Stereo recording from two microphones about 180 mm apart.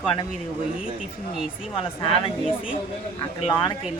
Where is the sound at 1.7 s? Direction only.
30° left (ahead or behind).